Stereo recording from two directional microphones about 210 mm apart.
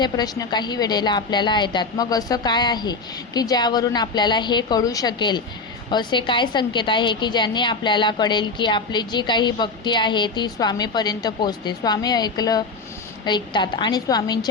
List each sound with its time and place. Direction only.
0.0 s a woman's voice: 20° left (ahead or behind)